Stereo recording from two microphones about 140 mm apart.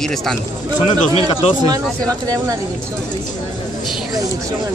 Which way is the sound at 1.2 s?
45° left (ahead or behind).